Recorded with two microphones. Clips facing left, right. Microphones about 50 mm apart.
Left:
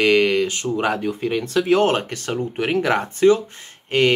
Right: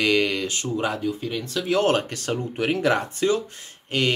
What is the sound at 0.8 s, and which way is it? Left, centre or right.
Speech, left.